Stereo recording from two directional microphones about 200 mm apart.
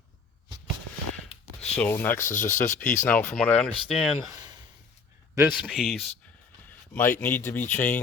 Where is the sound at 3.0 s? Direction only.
10° left (ahead or behind).